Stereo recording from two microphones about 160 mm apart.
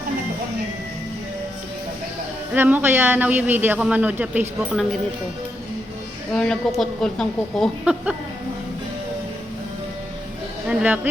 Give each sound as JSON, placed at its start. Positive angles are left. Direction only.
{"t": 2.5, "sound": "speech", "side_deg": -10}
{"t": 6.3, "sound": "speech", "side_deg": 5}
{"t": 10.7, "sound": "speech", "side_deg": -10}